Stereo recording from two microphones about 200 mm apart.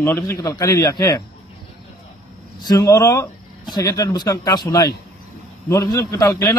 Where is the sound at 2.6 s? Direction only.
15° left (ahead or behind).